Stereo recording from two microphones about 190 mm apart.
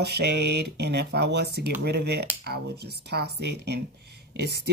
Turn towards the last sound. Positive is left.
turn(degrees=-60)  # may be behind; listen again after turning